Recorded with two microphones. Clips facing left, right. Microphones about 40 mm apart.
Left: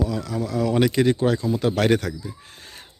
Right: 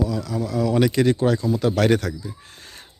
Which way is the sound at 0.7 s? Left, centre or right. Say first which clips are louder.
Right 1 dB; left.